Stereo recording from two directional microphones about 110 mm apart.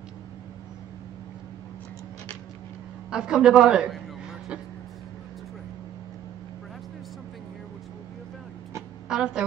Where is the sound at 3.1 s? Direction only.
5° right (ahead or behind).